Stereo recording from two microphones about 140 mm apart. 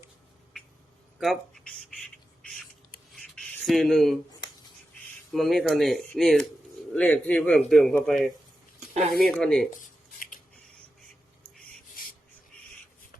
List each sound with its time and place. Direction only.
1.2 s speech: centre (ahead or behind)
3.3 s a sound: 5° left (ahead or behind)
5.3 s a man's voice: centre (ahead or behind)
9.8 s dishes: 70° left (ahead or behind)